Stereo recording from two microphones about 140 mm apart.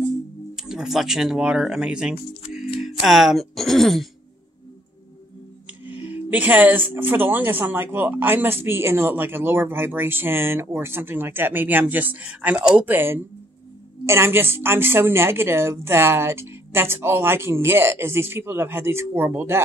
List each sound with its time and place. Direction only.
0.6 s speech: 5° right (ahead or behind)
6.0 s speech: 10° right (ahead or behind)